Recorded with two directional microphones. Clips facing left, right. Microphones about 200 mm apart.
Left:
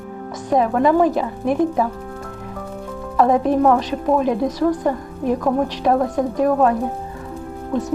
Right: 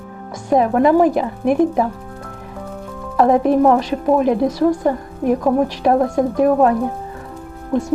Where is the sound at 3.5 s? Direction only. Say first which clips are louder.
Right 2 dB; 10° right (ahead or behind).